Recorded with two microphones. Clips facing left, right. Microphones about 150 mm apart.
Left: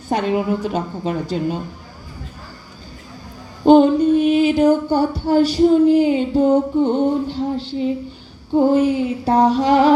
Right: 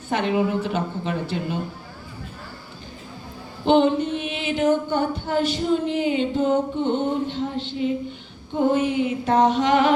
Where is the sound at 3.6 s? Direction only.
40° left (ahead or behind).